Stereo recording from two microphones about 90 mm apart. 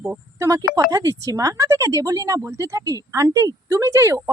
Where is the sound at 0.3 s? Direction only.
35° right (ahead or behind).